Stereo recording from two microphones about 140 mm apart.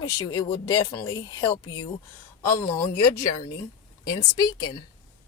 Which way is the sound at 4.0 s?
25° left (ahead or behind).